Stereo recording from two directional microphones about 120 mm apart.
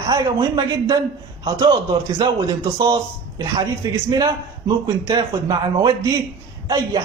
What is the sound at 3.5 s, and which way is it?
A man's voice, 30° right (ahead or behind).